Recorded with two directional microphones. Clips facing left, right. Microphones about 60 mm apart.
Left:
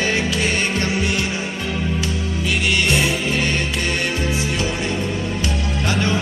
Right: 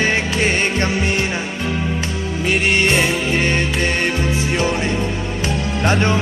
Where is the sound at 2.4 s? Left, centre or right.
Right.